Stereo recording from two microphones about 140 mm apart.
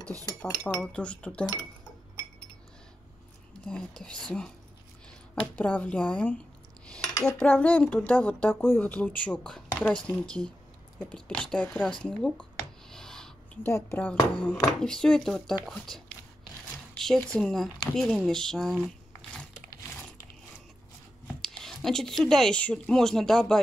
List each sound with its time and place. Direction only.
0.0 s speech: 25° right (ahead or behind)
0.4 s a woman's voice: 5° left (ahead or behind)
3.6 s a woman's voice: 5° left (ahead or behind)
12.9 s a sound: 5° left (ahead or behind)
13.7 s a woman's voice: 15° left (ahead or behind)
17.0 s speech: 5° left (ahead or behind)
21.4 s speech: 5° left (ahead or behind)